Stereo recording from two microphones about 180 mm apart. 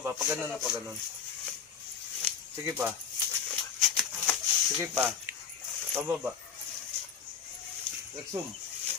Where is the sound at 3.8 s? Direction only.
Centre (ahead or behind).